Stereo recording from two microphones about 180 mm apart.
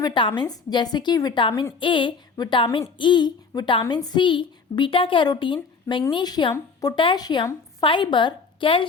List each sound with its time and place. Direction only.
0.0 s a woman's voice: 25° left (ahead or behind)